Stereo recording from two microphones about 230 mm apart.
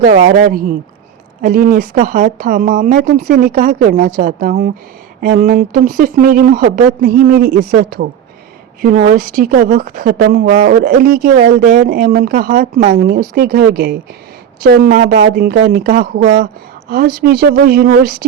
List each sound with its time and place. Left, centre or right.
0.0 s a woman's voice: right